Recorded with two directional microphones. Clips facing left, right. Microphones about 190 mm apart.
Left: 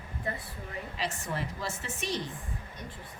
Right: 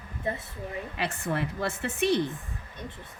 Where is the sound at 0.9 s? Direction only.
60° right (ahead or behind).